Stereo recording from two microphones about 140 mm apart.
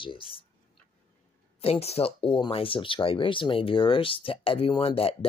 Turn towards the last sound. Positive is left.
turn(degrees=45)  # may be behind; listen again after turning